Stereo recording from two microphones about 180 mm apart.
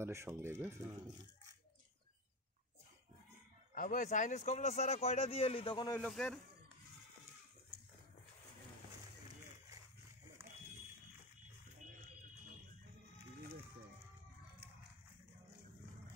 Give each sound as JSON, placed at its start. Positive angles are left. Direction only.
{"t": 0.0, "sound": "speech", "side_deg": -15}
{"t": 3.7, "sound": "speech", "side_deg": 45}
{"t": 5.9, "sound": "speech", "side_deg": 5}